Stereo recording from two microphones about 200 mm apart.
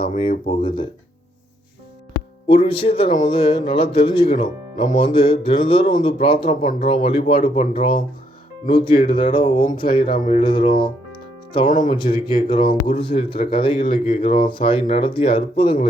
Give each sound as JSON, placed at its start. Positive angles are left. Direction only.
{"t": 0.0, "sound": "speech", "side_deg": 30}
{"t": 2.5, "sound": "speech", "side_deg": 30}
{"t": 4.8, "sound": "speech", "side_deg": 40}
{"t": 5.0, "sound": "speech", "side_deg": 25}
{"t": 11.6, "sound": "speech", "side_deg": 40}
{"t": 11.9, "sound": "speech", "side_deg": 25}